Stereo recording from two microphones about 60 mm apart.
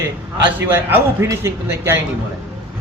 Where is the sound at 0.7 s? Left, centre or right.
Right.